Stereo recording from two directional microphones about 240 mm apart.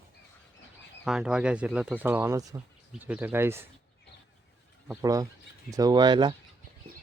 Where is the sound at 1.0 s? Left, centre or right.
Centre.